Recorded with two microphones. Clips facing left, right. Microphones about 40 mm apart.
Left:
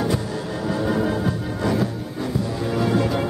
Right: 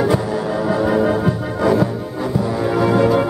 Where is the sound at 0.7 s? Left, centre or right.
Right.